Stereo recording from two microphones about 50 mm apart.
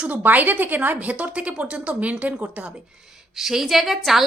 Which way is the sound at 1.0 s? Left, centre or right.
Right.